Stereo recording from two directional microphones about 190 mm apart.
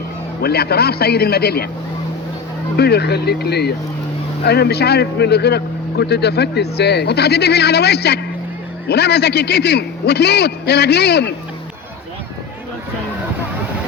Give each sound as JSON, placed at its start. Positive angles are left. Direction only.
{"t": 0.4, "sound": "speech", "side_deg": 55}
{"t": 2.7, "sound": "speech", "side_deg": 60}